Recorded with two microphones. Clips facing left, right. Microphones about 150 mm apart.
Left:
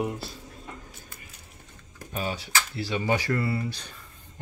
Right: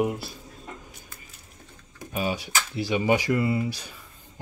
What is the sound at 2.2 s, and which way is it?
Speech, 15° right (ahead or behind).